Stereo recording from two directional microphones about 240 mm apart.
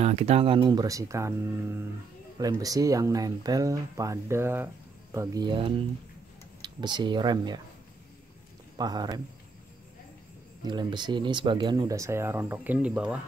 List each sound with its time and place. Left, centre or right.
0.0 s speech: right
8.7 s speech: centre
10.6 s speech: centre